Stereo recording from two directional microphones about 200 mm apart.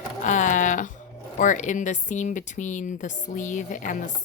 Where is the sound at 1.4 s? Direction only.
40° left (ahead or behind).